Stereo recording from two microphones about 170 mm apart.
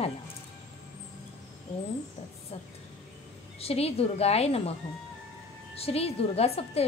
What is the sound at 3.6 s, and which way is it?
Speech, 35° left (ahead or behind).